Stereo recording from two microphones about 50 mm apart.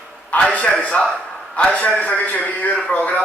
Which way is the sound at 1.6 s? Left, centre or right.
Left.